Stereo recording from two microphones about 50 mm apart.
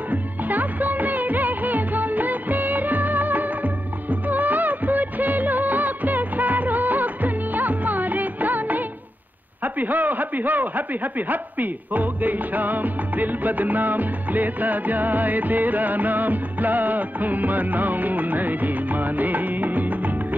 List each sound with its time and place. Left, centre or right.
0.1 s music of bollywood: right
9.8 s music: right